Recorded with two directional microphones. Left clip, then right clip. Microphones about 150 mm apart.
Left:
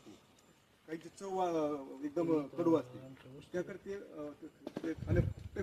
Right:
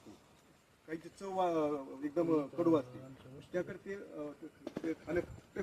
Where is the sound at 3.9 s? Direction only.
5° right (ahead or behind).